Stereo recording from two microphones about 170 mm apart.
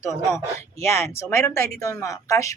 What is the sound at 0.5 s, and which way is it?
Speech, 15° left (ahead or behind).